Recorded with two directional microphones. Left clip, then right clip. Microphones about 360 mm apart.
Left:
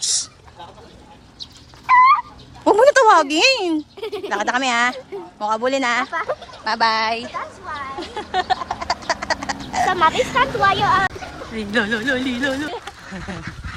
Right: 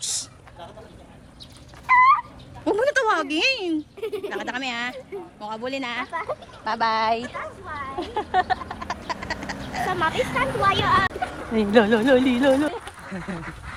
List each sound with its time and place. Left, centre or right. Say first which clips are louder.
1.9 s fowl: left 4 dB; centre
2.6 s speech: left 9 dB; centre
6.7 s a woman's voice: left 3 dB; centre
8.7 s frog: left 8 dB; centre
10.0 s speech: left 6 dB; left
11.5 s a woman's voice: right 3 dB; centre